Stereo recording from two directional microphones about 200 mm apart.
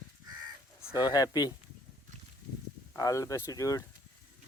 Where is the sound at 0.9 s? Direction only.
20° left (ahead or behind).